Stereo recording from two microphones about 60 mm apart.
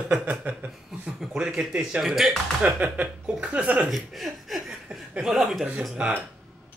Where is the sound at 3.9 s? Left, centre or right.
Centre.